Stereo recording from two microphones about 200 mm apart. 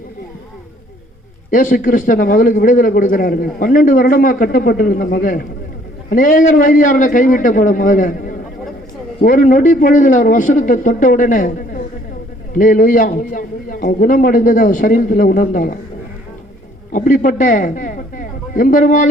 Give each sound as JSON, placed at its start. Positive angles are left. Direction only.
{"t": 1.5, "sound": "a man's voice", "side_deg": 40}
{"t": 16.9, "sound": "a man's voice", "side_deg": 40}